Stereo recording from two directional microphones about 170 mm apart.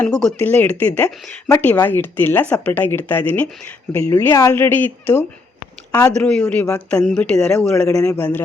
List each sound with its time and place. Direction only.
0.0 s speech: 5° left (ahead or behind)